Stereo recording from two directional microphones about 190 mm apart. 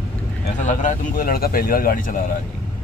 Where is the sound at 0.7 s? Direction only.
40° left (ahead or behind).